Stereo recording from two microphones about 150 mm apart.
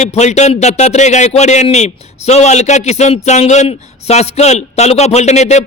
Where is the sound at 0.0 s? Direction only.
50° left (ahead or behind).